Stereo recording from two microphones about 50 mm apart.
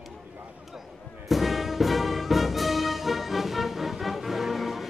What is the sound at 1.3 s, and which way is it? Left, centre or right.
Music, centre.